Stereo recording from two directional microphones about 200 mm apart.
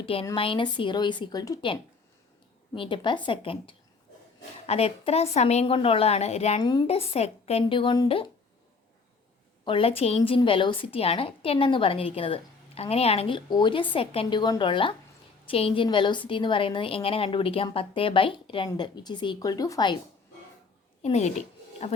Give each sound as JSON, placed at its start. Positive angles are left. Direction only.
{"t": 0.0, "sound": "a woman's voice", "side_deg": 25}
{"t": 6.6, "sound": "a woman's voice", "side_deg": 20}
{"t": 9.6, "sound": "a woman's voice", "side_deg": 30}
{"t": 21.0, "sound": "a woman's voice", "side_deg": 35}